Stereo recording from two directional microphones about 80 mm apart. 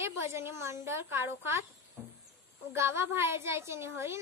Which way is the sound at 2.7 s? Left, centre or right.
Right.